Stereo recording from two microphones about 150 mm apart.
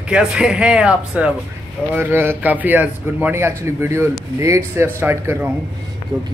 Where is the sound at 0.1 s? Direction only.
5° right (ahead or behind).